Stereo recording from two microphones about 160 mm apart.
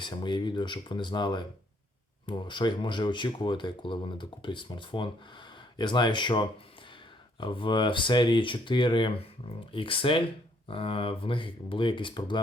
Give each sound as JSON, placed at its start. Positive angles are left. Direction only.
{"t": 0.0, "sound": "speech", "side_deg": 30}